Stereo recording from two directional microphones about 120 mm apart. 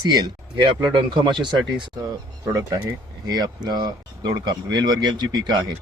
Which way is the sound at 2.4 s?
30° right (ahead or behind).